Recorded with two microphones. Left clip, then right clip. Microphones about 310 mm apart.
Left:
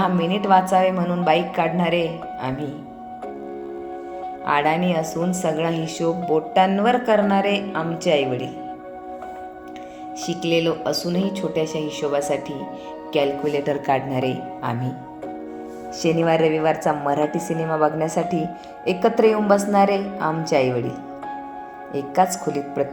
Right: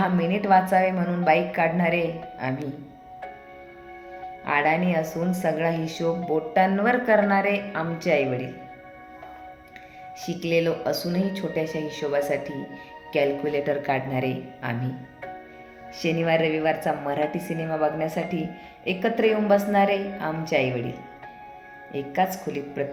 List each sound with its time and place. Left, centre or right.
0.0 s a woman's voice: centre
4.4 s a woman's voice: centre
10.2 s a woman's voice: centre
16.0 s a woman's voice: centre
21.9 s a woman's voice: centre